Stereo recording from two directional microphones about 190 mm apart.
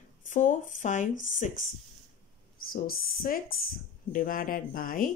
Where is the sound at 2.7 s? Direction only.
50° left (ahead or behind).